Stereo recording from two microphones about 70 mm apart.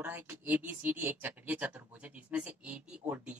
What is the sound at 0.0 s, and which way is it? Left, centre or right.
Speech, right.